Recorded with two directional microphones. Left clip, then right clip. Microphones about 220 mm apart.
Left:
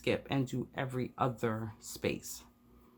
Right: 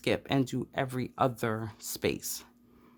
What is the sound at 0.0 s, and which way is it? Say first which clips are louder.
Speech: right 4 dB; 45° right (ahead or behind).